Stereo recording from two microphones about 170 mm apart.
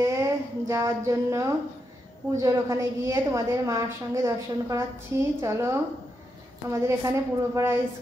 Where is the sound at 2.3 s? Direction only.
15° right (ahead or behind).